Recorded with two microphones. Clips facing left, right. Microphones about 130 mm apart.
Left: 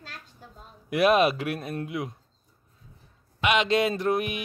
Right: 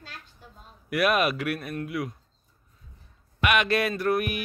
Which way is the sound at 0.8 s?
25° left (ahead or behind).